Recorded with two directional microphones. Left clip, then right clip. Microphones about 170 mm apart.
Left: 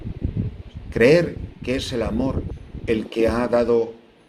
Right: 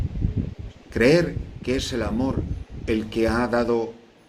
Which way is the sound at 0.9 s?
20° left (ahead or behind).